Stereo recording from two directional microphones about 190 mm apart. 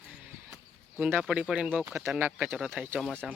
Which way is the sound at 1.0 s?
10° right (ahead or behind).